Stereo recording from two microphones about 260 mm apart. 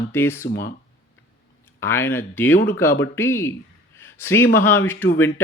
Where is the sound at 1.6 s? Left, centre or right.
Centre.